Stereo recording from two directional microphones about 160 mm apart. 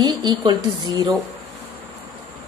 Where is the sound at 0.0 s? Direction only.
25° right (ahead or behind).